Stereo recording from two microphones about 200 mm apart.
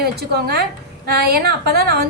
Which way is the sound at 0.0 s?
50° right (ahead or behind).